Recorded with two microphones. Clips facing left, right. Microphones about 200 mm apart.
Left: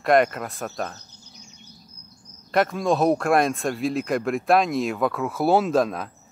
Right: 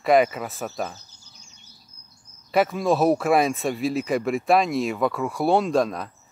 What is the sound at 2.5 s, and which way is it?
Speech, 5° right (ahead or behind).